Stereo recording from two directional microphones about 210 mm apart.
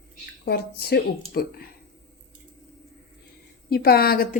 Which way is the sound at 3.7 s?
45° left (ahead or behind).